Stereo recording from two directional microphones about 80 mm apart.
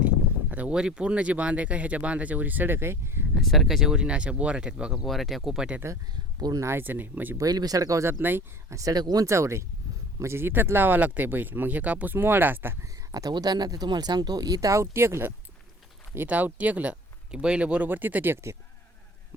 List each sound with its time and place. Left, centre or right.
0.5 s speech: centre; by 3.2 s right
3.4 s speech: centre
5.0 s speech: centre
6.6 s speech: right
7.3 s speech: right
8.2 s speech: right
8.7 s speech: right
9.2 s speech: right
12.8 s speech: right
16.1 s speech: right